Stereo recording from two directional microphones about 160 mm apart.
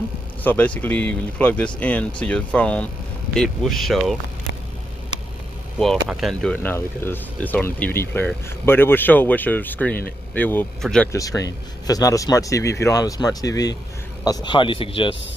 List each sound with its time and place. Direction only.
0.4 s speech: 10° left (ahead or behind)
5.8 s speech: centre (ahead or behind)
11.1 s speech: 20° left (ahead or behind)